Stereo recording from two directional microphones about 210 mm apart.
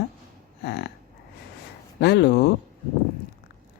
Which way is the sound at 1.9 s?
55° left (ahead or behind).